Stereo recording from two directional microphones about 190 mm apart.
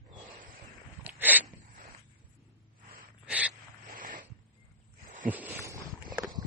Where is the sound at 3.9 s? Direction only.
45° right (ahead or behind).